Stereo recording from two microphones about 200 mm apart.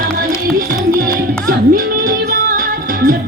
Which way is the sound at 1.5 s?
45° right (ahead or behind).